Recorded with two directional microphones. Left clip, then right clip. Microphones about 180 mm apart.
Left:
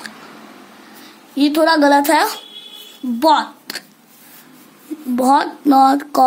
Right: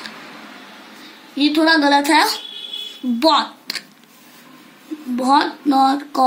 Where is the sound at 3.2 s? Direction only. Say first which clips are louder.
Left 2 dB; 55° left (ahead or behind).